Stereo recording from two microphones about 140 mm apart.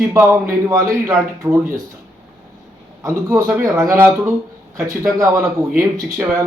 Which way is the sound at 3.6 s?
20° right (ahead or behind).